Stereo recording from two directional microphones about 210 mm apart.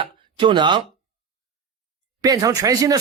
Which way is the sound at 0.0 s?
25° right (ahead or behind).